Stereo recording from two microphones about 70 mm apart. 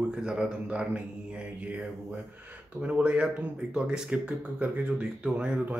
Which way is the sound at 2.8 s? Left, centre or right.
Centre.